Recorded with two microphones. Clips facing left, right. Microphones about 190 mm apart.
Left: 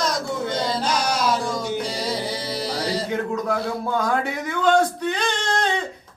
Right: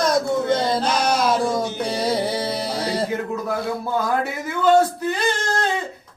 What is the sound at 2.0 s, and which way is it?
Music, 55° right (ahead or behind).